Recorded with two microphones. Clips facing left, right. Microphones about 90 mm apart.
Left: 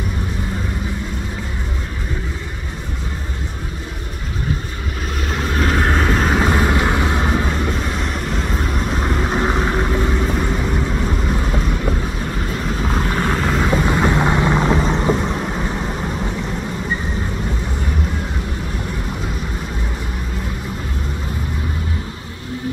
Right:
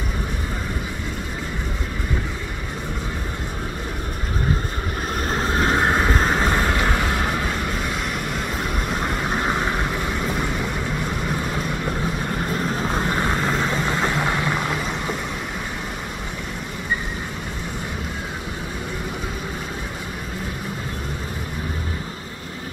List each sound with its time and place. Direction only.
5.3 s vehicle: 30° right (ahead or behind); by 6.3 s 5° right (ahead or behind)
6.3 s vehicle: 15° left (ahead or behind)
9.3 s vehicle: 20° left (ahead or behind)
12.9 s vehicle: 10° right (ahead or behind)
13.2 s vehicle: centre (ahead or behind)
13.7 s vehicle: 15° left (ahead or behind)